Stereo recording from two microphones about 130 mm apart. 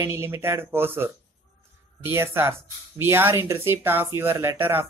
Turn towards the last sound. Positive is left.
turn(degrees=-15)  # may be behind; listen again after turning